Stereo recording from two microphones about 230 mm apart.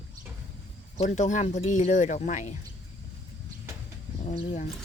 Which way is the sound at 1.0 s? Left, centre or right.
Left.